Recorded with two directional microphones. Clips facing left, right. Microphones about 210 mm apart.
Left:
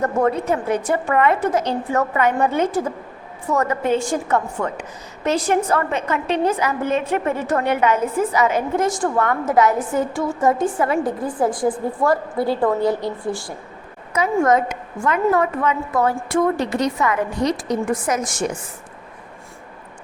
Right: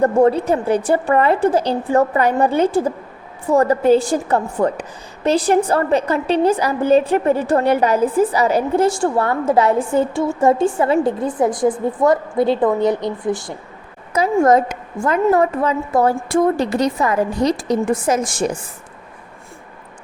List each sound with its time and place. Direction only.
0.0 s a woman's voice: 30° right (ahead or behind)
14.2 s a woman's voice: 35° right (ahead or behind)